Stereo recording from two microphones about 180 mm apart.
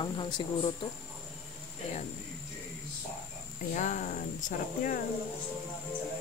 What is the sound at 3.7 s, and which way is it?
Speech, 45° left (ahead or behind).